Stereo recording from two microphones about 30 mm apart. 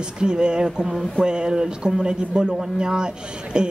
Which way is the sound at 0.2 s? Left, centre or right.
Right.